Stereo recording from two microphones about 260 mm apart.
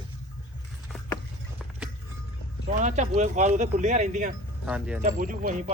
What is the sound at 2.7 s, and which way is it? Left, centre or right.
Speech, right.